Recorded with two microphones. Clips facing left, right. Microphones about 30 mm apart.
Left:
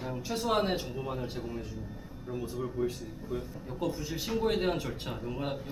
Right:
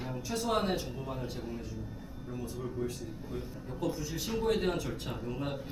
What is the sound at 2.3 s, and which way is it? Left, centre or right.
A man's voice, centre.